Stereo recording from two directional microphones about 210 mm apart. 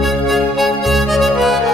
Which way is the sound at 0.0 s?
Centre (ahead or behind).